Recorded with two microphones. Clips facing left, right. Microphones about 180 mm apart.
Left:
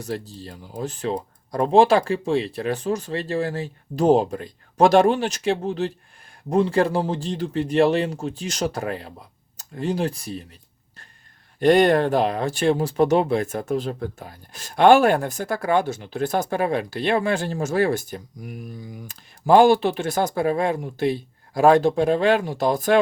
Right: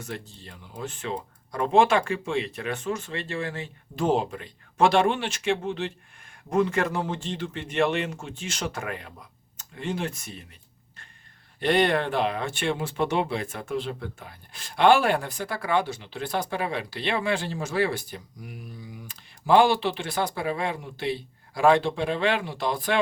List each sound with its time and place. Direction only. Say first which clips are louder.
0.0 s speech: left 7 dB; 35° left (ahead or behind)
11.6 s speech: left 7 dB; 45° left (ahead or behind)